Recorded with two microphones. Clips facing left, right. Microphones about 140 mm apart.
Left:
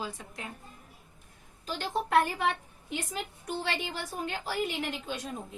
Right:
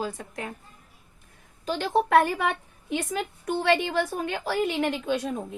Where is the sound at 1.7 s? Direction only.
75° right (ahead or behind).